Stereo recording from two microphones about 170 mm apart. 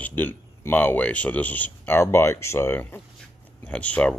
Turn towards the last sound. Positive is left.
turn(degrees=5)  # may be behind; listen again after turning